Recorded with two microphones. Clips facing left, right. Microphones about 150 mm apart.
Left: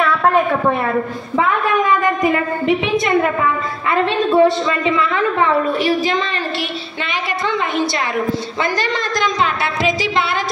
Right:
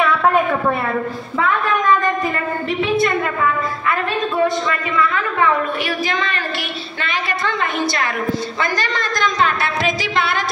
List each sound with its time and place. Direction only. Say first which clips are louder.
0.0 s a sound: left 1 dB; centre (ahead or behind)
2.2 s a woman's voice: left 5 dB; 15° left (ahead or behind)
4.3 s a woman's voice: left 6 dB; 25° left (ahead or behind)
8.5 s a woman's voice: left 2 dB; 25° left (ahead or behind)